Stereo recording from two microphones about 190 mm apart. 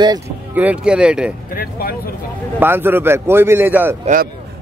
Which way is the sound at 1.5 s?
50° left (ahead or behind).